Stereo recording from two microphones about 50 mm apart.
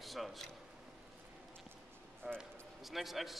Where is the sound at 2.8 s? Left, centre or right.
Centre.